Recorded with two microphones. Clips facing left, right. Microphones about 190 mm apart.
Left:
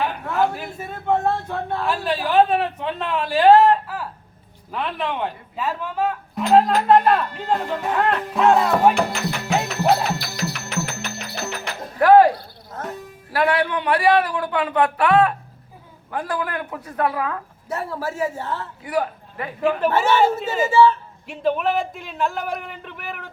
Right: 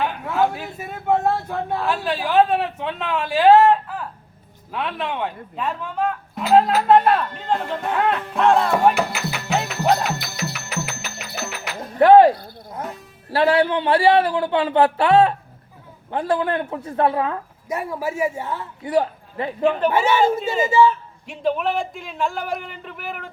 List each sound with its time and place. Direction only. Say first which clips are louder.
0.0 s speech: right 1 dB; centre (ahead or behind)
10.3 s music: left 2 dB; 5° right (ahead or behind)
11.9 s a sound: right 2 dB; 25° right (ahead or behind)
13.3 s a man's voice: right 3 dB; 30° right (ahead or behind)
17.7 s a man's voice: right 2 dB; 10° right (ahead or behind)
18.9 s speech: right 4 dB; 25° right (ahead or behind)
19.9 s a man's voice: even; 10° right (ahead or behind)